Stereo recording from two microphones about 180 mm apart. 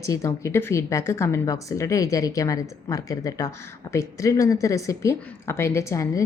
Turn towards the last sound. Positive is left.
turn(degrees=15)  # may be behind; listen again after turning